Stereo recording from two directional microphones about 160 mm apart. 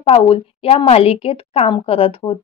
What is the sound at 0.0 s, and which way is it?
A woman's voice, 35° left (ahead or behind).